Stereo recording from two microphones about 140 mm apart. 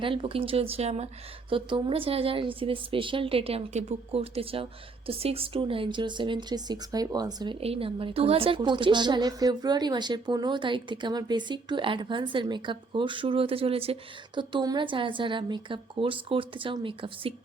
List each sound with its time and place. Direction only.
0.0 s a woman's voice: 40° right (ahead or behind)